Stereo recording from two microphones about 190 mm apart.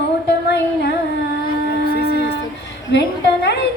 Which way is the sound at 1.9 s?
60° left (ahead or behind).